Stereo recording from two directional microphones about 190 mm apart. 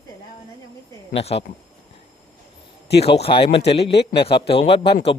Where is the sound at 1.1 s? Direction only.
30° left (ahead or behind).